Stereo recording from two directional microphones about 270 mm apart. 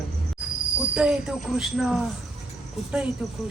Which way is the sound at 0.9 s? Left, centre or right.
Centre.